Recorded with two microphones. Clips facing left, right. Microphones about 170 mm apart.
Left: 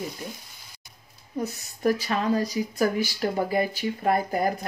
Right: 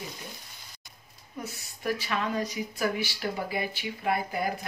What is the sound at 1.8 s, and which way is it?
Speech, 40° left (ahead or behind).